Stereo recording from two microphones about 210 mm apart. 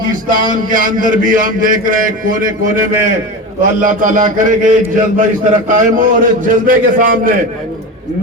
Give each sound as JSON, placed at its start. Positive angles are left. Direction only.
{"t": 0.1, "sound": "a man's voice", "side_deg": -40}
{"t": 3.6, "sound": "a man's voice", "side_deg": -40}